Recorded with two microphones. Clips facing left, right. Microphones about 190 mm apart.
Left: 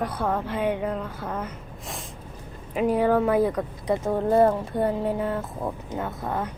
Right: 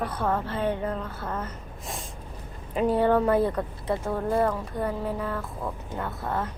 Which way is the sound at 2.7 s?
10° left (ahead or behind).